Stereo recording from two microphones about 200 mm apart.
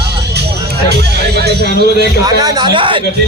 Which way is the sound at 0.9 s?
55° right (ahead or behind).